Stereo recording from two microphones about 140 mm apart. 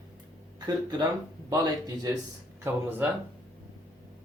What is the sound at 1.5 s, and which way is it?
Speech, 25° right (ahead or behind).